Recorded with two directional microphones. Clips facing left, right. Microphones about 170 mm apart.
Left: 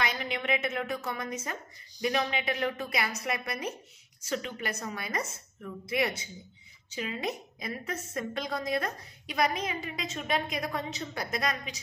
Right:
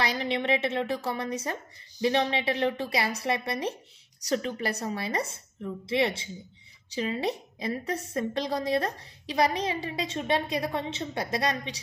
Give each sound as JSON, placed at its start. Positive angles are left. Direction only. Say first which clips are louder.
{"t": 0.0, "sound": "a woman's voice", "louder": "right 4 dB", "side_deg": -30}